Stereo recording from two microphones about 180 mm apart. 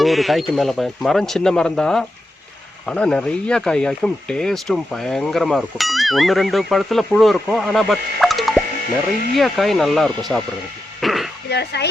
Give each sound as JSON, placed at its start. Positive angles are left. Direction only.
{"t": 0.0, "sound": "speech", "side_deg": 0}
{"t": 11.0, "sound": "a sound", "side_deg": 0}
{"t": 11.4, "sound": "speech", "side_deg": 65}